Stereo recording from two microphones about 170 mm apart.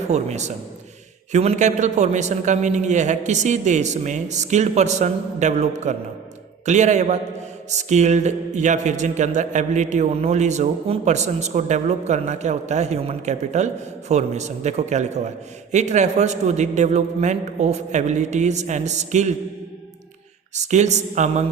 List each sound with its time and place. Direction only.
0.1 s a man's voice: 40° right (ahead or behind)
20.6 s speech: 45° right (ahead or behind)